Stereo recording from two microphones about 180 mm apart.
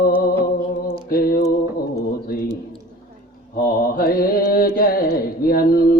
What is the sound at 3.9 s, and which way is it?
Carnatic music, 55° left (ahead or behind).